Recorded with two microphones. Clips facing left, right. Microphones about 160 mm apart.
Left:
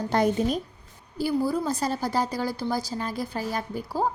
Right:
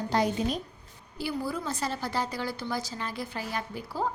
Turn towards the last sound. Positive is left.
turn(degrees=40)  # may be behind; listen again after turning